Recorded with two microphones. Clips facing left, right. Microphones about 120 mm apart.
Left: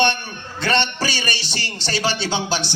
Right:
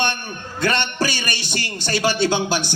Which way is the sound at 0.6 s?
50° right (ahead or behind).